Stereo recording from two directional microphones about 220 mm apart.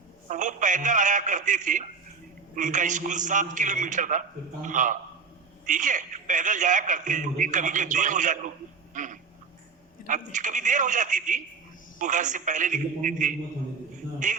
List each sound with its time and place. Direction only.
0.3 s a man's voice: 35° right (ahead or behind)